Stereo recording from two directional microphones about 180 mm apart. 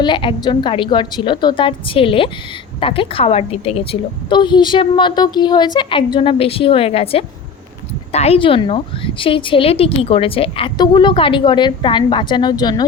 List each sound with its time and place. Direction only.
0.0 s a woman's voice: 25° left (ahead or behind)